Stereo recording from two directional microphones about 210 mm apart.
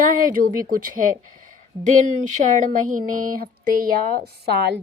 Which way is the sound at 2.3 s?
40° right (ahead or behind).